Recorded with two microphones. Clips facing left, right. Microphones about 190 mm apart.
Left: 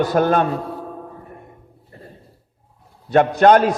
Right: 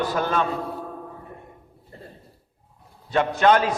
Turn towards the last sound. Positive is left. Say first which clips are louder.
# left 6 dB
turn(degrees=50)  # may be behind; listen again after turning